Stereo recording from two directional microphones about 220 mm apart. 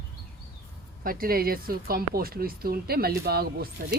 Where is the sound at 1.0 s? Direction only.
40° right (ahead or behind).